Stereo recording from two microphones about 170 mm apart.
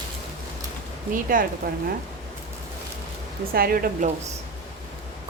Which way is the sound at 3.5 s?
60° right (ahead or behind).